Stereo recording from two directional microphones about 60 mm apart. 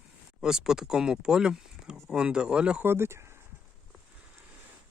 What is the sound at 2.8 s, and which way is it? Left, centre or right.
Speech, right.